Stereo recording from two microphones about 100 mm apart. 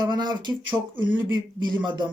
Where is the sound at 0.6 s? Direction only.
20° right (ahead or behind).